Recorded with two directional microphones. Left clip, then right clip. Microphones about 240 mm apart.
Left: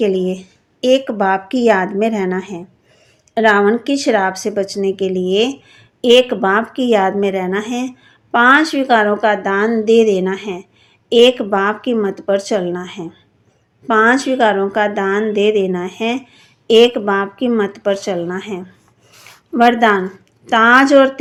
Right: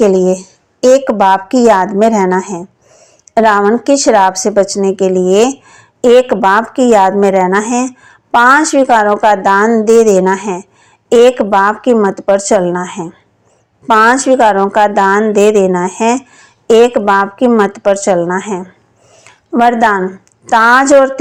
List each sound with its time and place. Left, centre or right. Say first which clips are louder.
0.0 s a woman's voice: right 8 dB; right